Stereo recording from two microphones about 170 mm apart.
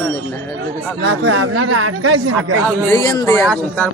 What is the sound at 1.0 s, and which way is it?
Speech, 90° right.